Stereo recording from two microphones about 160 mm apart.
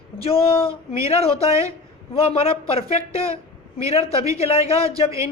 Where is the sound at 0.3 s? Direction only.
35° left (ahead or behind).